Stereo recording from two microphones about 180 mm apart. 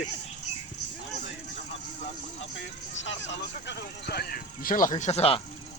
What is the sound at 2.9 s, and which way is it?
Speech, 90° left.